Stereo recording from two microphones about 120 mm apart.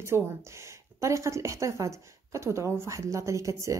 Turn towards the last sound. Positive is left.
turn(degrees=-25)  # may be behind; listen again after turning